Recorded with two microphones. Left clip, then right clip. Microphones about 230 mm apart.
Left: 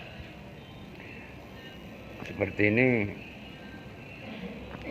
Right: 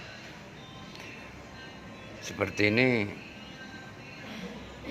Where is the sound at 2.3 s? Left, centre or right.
Centre.